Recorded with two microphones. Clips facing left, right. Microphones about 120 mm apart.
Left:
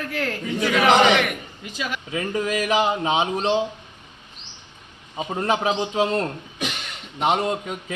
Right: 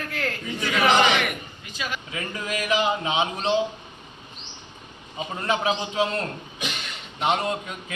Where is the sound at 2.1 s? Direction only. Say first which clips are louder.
Left 6 dB; 35° left (ahead or behind).